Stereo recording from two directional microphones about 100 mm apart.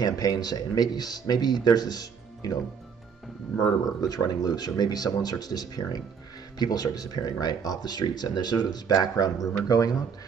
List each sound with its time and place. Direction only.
0.0 s speech: 40° left (ahead or behind)
4.0 s speech: 40° left (ahead or behind)